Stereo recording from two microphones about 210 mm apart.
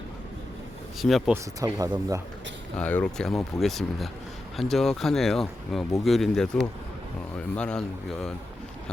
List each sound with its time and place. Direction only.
0.9 s speech: centre (ahead or behind)
1.3 s speech: 15° right (ahead or behind)
2.7 s speech: 5° left (ahead or behind)